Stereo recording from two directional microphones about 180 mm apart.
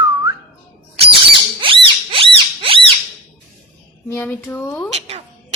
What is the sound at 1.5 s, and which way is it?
Rodents, 30° right (ahead or behind).